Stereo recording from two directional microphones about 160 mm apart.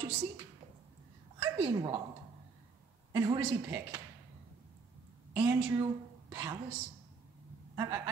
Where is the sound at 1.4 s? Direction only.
20° right (ahead or behind).